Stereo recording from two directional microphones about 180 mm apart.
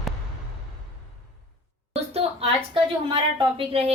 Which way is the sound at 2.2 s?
30° right (ahead or behind).